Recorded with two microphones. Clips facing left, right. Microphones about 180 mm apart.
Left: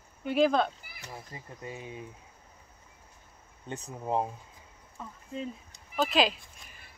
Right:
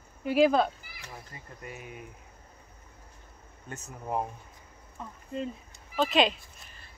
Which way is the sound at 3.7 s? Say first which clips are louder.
Left 2 dB; 20° left (ahead or behind).